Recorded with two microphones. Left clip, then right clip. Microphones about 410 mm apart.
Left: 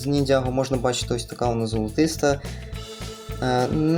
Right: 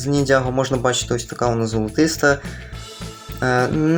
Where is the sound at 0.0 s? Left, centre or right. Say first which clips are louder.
Right 4 dB; left.